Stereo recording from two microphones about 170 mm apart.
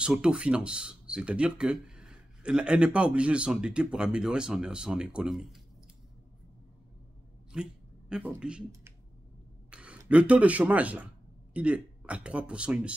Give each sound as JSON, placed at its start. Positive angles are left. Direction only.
{"t": 0.0, "sound": "speech", "side_deg": -5}
{"t": 7.5, "sound": "speech", "side_deg": -5}